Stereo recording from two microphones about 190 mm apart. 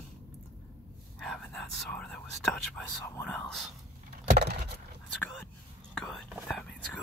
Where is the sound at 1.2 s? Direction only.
5° left (ahead or behind).